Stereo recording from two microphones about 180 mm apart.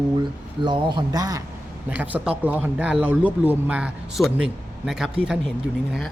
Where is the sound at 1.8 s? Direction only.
10° right (ahead or behind).